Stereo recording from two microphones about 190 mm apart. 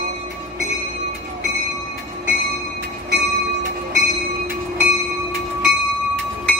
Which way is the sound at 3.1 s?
60° right (ahead or behind).